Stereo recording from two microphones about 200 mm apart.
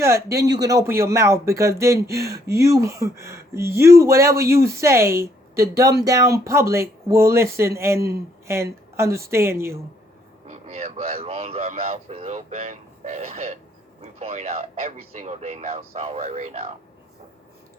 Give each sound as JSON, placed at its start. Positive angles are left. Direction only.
{"t": 0.0, "sound": "a woman's voice", "side_deg": -15}
{"t": 10.4, "sound": "speech", "side_deg": -35}